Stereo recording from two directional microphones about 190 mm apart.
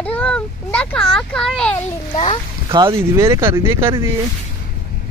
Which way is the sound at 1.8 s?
30° left (ahead or behind).